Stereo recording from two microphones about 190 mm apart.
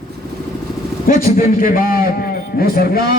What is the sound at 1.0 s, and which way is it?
A man's voice, 45° left (ahead or behind).